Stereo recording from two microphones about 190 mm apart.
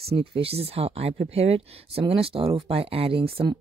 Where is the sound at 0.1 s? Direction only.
30° right (ahead or behind).